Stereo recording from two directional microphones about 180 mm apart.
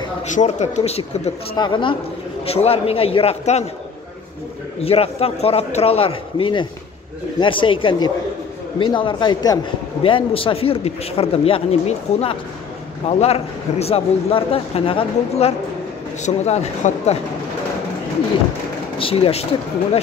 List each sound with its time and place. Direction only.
0.3 s speech: 40° left (ahead or behind)
4.8 s speech: 35° left (ahead or behind)
18.9 s speech: 30° left (ahead or behind)